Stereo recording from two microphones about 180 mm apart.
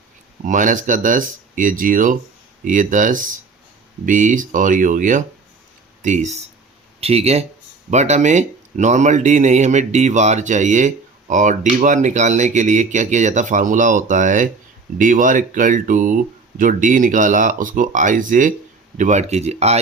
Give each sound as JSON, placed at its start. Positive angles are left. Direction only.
{"t": 0.4, "sound": "speech", "side_deg": -45}